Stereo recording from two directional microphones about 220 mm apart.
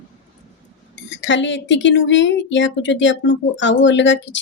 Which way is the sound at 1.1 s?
55° left (ahead or behind).